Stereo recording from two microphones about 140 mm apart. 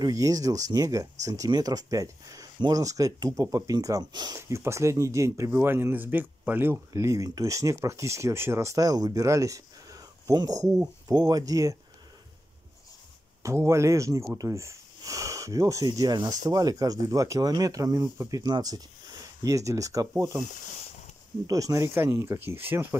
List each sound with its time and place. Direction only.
0.0 s speech: 25° right (ahead or behind)
4.4 s speech: 20° right (ahead or behind)
13.4 s speech: 20° right (ahead or behind)
21.5 s speech: 25° right (ahead or behind)